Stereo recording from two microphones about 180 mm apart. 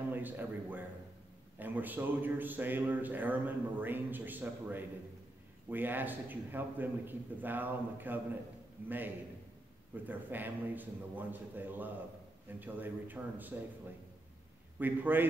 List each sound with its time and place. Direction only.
0.1 s a man's voice: 10° right (ahead or behind)
14.8 s a man's voice: 10° right (ahead or behind)